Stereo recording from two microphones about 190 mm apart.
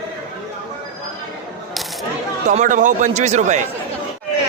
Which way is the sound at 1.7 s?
Centre (ahead or behind).